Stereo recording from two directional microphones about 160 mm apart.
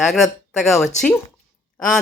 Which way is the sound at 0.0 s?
Centre (ahead or behind).